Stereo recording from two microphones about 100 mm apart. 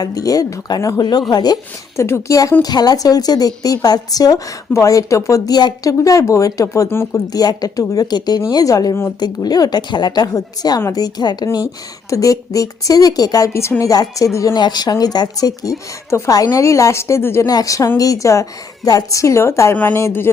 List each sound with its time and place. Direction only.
0.0 s a woman's voice: 35° left (ahead or behind)
2.0 s a woman's voice: 30° left (ahead or behind)
7.3 s a woman's voice: 40° left (ahead or behind)
10.8 s a man's voice: 30° left (ahead or behind)
11.0 s a woman's voice: 45° left (ahead or behind); by 17.5 s 25° left (ahead or behind)
17.5 s a woman's voice: 35° left (ahead or behind)